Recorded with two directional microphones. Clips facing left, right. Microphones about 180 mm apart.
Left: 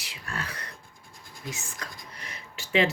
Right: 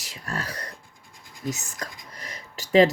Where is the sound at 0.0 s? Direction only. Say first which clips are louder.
Right 4 dB; 40° right (ahead or behind).